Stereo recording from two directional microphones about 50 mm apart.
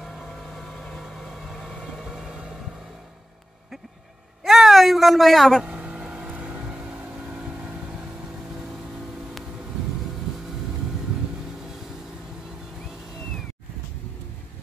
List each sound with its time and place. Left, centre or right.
0.0 s vehicle: centre
4.5 s a sound: centre
5.6 s vehicle: right